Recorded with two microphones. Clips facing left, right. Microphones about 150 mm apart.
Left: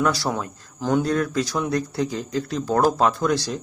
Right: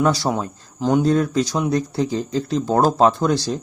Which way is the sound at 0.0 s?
20° right (ahead or behind).